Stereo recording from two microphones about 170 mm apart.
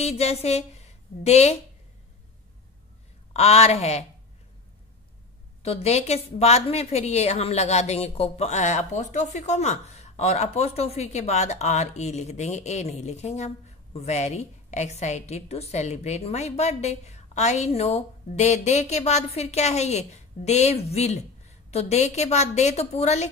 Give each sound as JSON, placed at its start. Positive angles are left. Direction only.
{"t": 0.0, "sound": "a woman's voice", "side_deg": 40}
{"t": 3.3, "sound": "a woman's voice", "side_deg": 40}
{"t": 5.6, "sound": "a woman's voice", "side_deg": 40}